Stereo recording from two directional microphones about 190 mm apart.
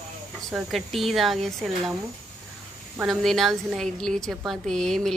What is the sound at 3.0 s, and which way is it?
A woman's voice, centre (ahead or behind).